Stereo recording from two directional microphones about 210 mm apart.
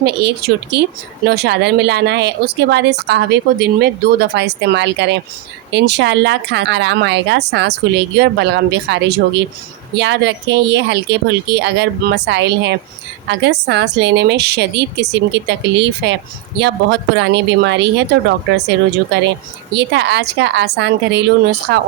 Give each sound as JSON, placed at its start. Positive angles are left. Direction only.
{"t": 0.0, "sound": "speech", "side_deg": -50}
{"t": 19.7, "sound": "speech", "side_deg": -55}